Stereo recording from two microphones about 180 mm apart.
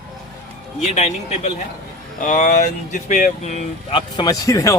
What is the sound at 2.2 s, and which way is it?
Speech, 45° left (ahead or behind).